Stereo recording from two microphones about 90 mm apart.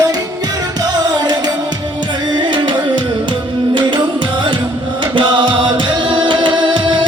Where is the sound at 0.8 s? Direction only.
50° right (ahead or behind).